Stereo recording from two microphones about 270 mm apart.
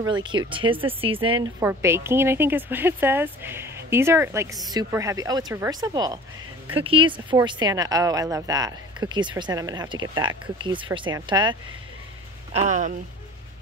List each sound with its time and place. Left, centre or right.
0.0 s speech: centre
1.6 s speech: centre
12.5 s speech: right